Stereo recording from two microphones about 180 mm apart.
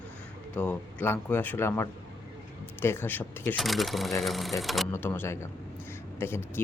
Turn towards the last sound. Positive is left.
turn(degrees=15)  # may be behind; listen again after turning